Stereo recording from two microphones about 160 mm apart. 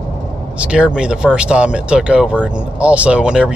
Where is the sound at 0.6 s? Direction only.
5° right (ahead or behind).